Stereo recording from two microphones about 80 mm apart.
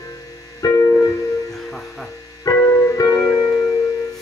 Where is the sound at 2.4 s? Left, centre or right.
Left.